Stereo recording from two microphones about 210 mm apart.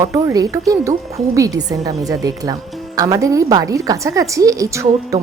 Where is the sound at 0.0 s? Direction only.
15° right (ahead or behind).